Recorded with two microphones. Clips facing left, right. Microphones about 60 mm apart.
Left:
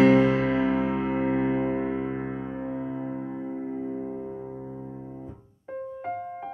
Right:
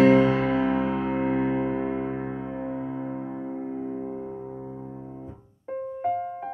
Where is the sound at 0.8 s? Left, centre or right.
Left.